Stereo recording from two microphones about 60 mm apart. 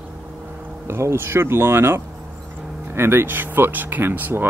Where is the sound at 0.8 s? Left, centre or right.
Right.